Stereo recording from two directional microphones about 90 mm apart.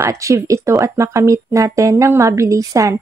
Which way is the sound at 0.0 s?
35° right (ahead or behind).